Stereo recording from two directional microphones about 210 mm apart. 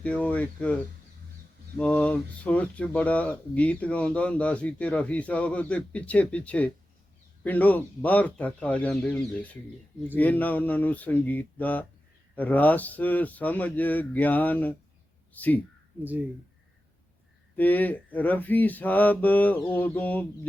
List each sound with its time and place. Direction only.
0.0 s speech: 5° left (ahead or behind)
1.8 s speech: 5° left (ahead or behind)
17.6 s speech: 10° left (ahead or behind)